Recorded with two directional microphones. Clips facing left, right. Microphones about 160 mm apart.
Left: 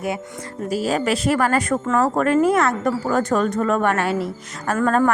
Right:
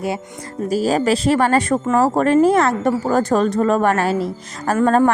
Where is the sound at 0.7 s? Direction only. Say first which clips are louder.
Right 4 dB; 35° right (ahead or behind).